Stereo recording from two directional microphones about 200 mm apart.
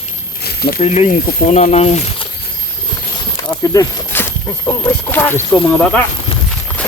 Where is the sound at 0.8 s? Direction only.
35° left (ahead or behind).